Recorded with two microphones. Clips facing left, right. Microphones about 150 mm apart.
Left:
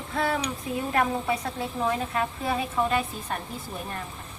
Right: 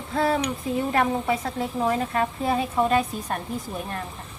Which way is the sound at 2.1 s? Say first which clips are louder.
Right 4 dB; 35° right (ahead or behind).